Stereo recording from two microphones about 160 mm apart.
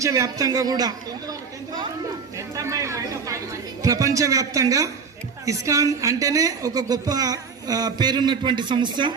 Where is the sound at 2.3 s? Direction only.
20° right (ahead or behind).